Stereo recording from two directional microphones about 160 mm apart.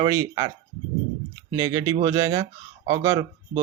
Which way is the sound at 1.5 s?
25° right (ahead or behind).